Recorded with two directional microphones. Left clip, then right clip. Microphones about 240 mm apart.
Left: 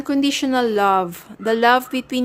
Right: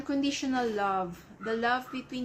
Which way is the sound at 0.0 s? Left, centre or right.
Left.